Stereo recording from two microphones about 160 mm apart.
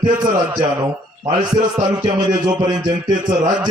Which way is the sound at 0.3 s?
25° right (ahead or behind).